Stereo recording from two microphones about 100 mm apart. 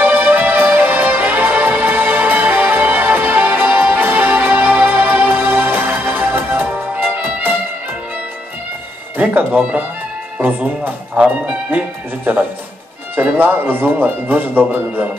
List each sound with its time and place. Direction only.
0.0 s music: 20° right (ahead or behind)
9.1 s speech: 15° right (ahead or behind)
13.1 s speech: 20° right (ahead or behind)